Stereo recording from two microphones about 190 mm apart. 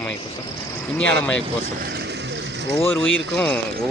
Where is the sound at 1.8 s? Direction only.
60° right (ahead or behind).